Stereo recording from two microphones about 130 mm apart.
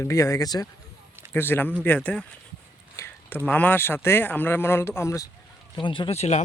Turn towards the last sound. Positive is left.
turn(degrees=55)  # may be behind; listen again after turning